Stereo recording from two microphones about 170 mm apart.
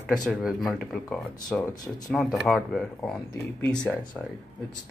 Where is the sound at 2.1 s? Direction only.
Centre (ahead or behind).